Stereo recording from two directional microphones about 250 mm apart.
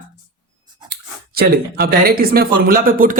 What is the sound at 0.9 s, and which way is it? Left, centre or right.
A woman's voice, right.